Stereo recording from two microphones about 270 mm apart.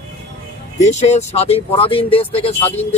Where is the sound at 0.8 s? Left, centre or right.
Left.